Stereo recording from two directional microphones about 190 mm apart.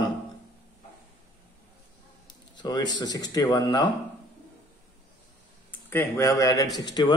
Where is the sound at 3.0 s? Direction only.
20° left (ahead or behind).